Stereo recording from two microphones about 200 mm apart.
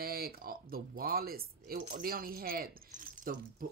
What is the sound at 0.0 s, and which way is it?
Speech, 50° right (ahead or behind).